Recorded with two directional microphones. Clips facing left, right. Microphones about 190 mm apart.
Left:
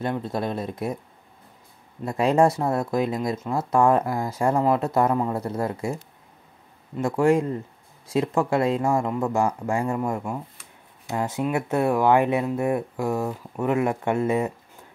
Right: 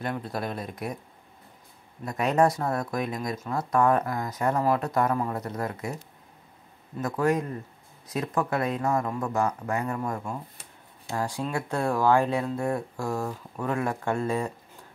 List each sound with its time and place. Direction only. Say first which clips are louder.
0.0 s speech: left 5 dB; 25° left (ahead or behind)
2.0 s speech: left 4 dB; 30° left (ahead or behind)
7.0 s speech: left 5 dB; 25° left (ahead or behind)